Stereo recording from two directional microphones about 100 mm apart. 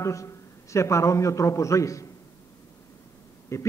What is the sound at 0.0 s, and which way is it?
A man's voice, 30° left (ahead or behind).